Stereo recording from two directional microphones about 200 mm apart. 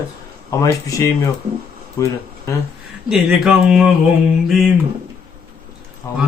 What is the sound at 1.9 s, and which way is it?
Speech, 15° left (ahead or behind).